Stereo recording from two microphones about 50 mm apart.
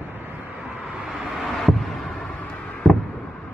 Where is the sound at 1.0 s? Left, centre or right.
Centre.